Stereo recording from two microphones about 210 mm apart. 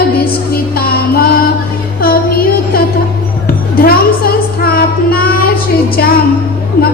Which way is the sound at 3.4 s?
45° left (ahead or behind).